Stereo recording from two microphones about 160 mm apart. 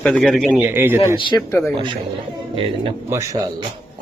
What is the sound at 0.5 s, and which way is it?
Speech, 15° right (ahead or behind).